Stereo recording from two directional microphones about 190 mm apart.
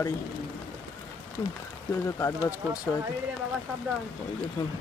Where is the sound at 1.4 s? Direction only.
20° left (ahead or behind).